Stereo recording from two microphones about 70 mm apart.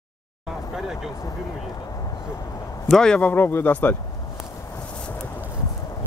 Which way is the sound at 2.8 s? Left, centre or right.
Centre.